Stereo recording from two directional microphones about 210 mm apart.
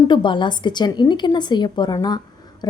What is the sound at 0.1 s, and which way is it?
A woman's voice, 20° left (ahead or behind).